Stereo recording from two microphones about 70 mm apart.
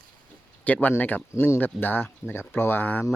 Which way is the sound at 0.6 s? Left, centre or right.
Left.